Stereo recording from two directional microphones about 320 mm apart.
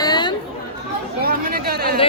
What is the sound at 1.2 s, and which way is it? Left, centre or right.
Speech, right.